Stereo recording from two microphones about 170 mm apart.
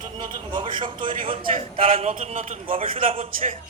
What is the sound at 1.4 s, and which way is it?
A man's voice, 50° right (ahead or behind).